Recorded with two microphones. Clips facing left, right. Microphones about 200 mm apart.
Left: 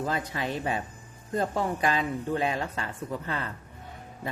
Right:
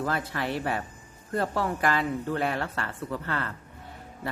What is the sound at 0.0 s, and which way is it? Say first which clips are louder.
Speech: right 1 dB; 20° left (ahead or behind).